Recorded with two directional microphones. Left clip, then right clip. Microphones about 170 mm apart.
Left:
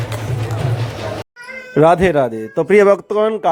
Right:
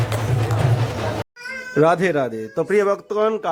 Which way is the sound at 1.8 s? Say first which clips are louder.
Left 5 dB; 20° left (ahead or behind).